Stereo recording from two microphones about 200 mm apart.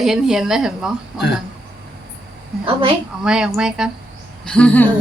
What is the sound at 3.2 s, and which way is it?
A woman's voice, 5° right (ahead or behind).